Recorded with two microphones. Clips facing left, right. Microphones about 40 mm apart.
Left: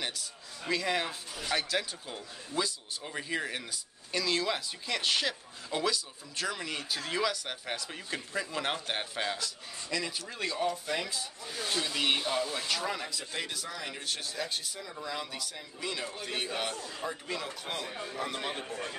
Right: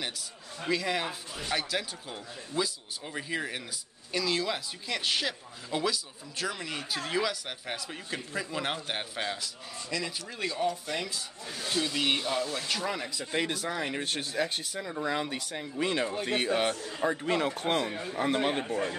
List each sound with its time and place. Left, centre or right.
0.7 s speech: centre
13.2 s speech: right
18.1 s speech: right